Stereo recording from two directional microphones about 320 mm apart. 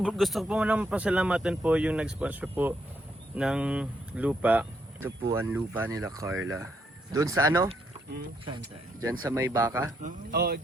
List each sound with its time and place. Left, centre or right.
0.0 s speech: centre
10.0 s speech: right